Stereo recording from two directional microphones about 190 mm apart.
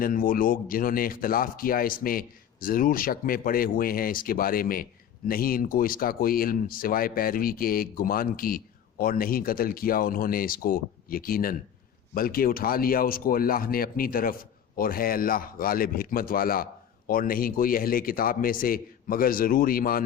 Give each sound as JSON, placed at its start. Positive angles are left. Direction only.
{"t": 0.0, "sound": "speech", "side_deg": 50}